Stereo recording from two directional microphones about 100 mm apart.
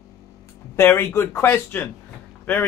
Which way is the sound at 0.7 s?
25° left (ahead or behind).